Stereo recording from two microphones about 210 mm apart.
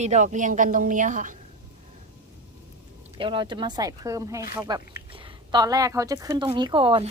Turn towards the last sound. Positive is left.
turn(degrees=-25)  # may be behind; listen again after turning